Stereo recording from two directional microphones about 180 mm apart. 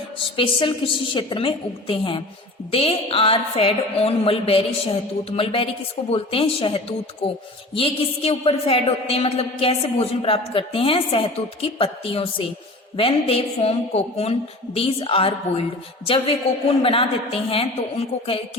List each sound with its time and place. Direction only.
0.3 s a woman's voice: 30° left (ahead or behind)